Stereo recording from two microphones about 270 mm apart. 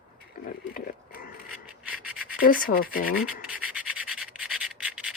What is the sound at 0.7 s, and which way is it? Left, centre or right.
Pig, left.